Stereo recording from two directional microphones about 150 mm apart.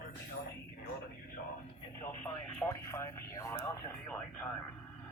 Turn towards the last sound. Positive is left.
turn(degrees=20)  # may be behind; listen again after turning